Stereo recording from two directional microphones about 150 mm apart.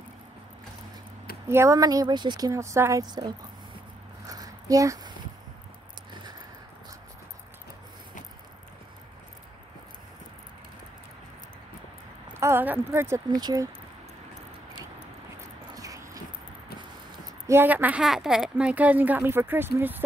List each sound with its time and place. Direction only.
1.5 s a woman's voice: 20° right (ahead or behind)
4.3 s a sound: 20° right (ahead or behind)
12.4 s speech: 15° right (ahead or behind)
13.3 s a woman's voice: 25° right (ahead or behind)
15.7 s a sound: 25° right (ahead or behind)
17.5 s a woman's voice: 15° right (ahead or behind)